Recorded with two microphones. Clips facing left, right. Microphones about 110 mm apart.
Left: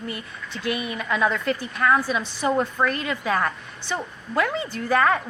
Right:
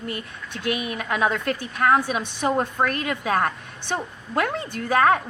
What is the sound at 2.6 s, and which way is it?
A woman's voice, 50° right (ahead or behind).